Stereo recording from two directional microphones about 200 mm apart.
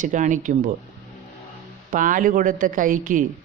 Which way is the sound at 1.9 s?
40° right (ahead or behind).